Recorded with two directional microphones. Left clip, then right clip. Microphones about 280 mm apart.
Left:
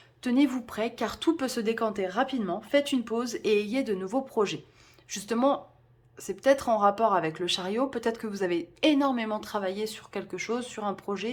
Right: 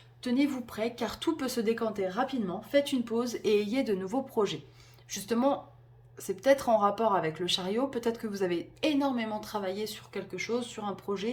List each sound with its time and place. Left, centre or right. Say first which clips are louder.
0.2 s a woman's voice: left 4 dB; centre